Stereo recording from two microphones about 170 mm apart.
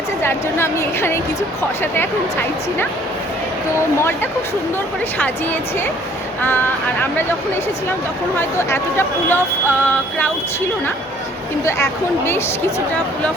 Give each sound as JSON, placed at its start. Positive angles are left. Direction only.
{"t": 0.2, "sound": "speech", "side_deg": 15}
{"t": 8.4, "sound": "speech", "side_deg": 15}
{"t": 11.6, "sound": "speech", "side_deg": 15}